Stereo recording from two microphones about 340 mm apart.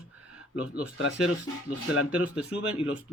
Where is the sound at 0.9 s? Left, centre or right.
Left.